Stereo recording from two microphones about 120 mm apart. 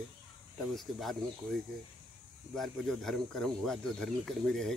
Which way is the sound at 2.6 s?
5° left (ahead or behind).